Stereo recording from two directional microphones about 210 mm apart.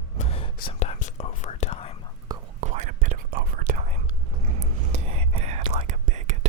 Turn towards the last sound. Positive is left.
turn(degrees=-35)  # may be behind; listen again after turning